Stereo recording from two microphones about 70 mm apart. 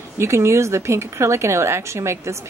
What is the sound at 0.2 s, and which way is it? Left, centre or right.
Speech, right.